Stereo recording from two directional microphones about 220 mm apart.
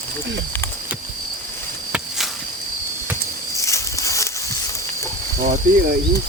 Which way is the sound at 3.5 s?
15° left (ahead or behind).